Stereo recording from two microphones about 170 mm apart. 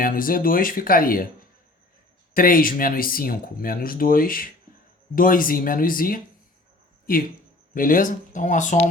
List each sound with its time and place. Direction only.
0.0 s speech: 55° left (ahead or behind)
2.3 s speech: 55° left (ahead or behind)
7.7 s speech: 55° left (ahead or behind)